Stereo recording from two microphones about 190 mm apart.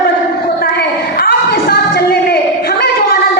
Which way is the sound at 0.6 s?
55° left (ahead or behind).